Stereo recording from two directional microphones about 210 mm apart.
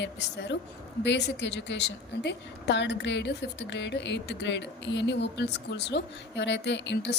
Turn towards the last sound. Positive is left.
turn(degrees=55)  # may be behind; listen again after turning